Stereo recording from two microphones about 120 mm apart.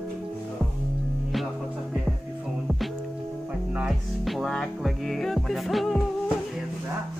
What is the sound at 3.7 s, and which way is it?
Music, 5° right (ahead or behind).